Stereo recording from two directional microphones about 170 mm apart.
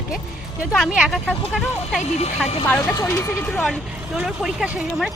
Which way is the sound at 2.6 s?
10° left (ahead or behind).